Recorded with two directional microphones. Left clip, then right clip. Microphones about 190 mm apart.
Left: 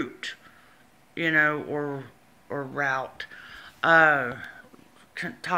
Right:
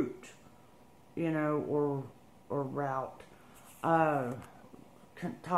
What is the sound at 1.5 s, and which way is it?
Speech, 30° left (ahead or behind).